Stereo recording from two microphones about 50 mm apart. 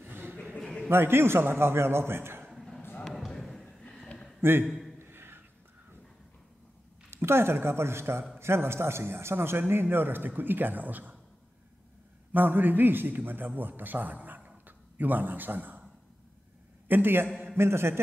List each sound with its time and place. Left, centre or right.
0.0 s a sound: right
0.8 s speech: right
2.5 s a sound: centre
3.0 s basketball bounce: centre
4.4 s a man's voice: right
4.6 s a man's voice: centre
4.9 s a sound: right
7.1 s speech: right
12.3 s a man's voice: right
16.8 s a man's voice: right
17.6 s speech: right